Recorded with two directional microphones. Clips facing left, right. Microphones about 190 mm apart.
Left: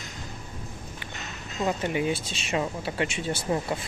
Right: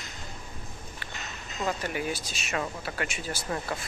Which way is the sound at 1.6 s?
20° left (ahead or behind).